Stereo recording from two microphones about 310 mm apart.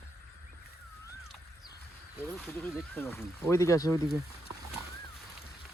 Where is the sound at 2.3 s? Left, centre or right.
Centre.